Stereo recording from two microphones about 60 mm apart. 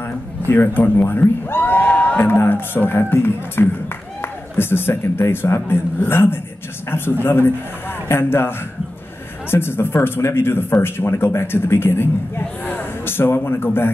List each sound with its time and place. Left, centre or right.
0.0 s speech: left
2.2 s speech: left